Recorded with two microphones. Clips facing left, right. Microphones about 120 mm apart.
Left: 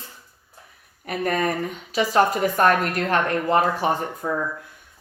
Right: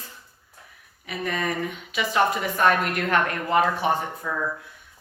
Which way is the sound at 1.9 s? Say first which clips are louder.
Left 4 dB; 35° left (ahead or behind).